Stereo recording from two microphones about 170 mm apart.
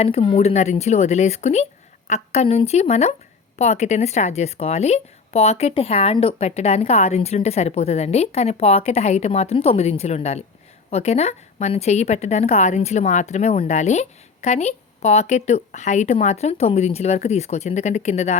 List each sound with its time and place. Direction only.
0.0 s a woman's voice: 35° left (ahead or behind)